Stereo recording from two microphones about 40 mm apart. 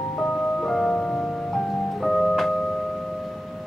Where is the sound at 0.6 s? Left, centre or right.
Centre.